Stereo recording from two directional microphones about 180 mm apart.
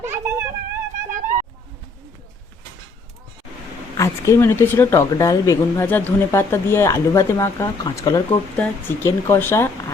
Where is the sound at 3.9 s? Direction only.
15° left (ahead or behind).